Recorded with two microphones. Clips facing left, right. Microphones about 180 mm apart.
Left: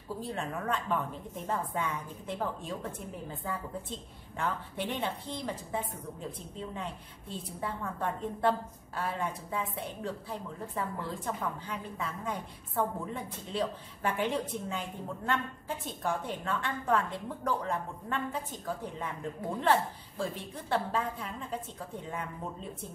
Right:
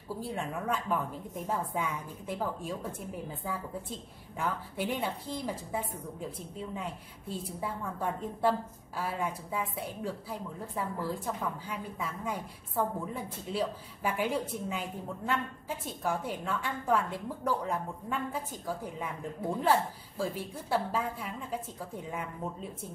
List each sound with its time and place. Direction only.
0.2 s a woman's voice: 10° right (ahead or behind)
19.6 s a woman's voice: 10° right (ahead or behind)